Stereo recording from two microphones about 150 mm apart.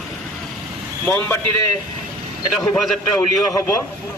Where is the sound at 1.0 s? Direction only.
15° left (ahead or behind).